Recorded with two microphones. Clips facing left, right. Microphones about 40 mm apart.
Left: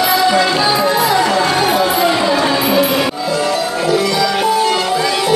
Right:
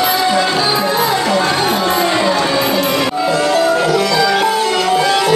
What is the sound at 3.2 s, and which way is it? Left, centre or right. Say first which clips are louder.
Music: right 3 dB; right.